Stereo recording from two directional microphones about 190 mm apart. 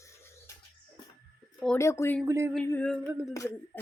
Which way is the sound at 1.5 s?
5° left (ahead or behind).